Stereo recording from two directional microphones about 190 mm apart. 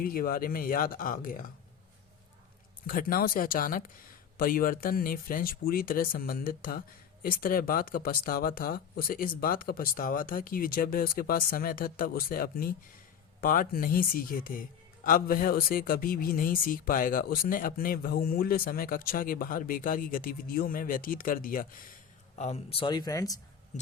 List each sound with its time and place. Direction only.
0.0 s speech: 50° left (ahead or behind)
2.8 s speech: 50° left (ahead or behind)
22.4 s speech: 35° left (ahead or behind); by 23.4 s 20° left (ahead or behind)